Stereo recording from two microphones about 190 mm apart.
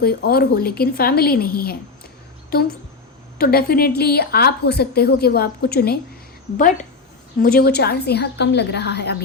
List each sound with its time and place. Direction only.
0.0 s a woman's voice: 55° left (ahead or behind)
3.3 s a woman's voice: 55° left (ahead or behind)
7.4 s a woman's voice: 55° left (ahead or behind)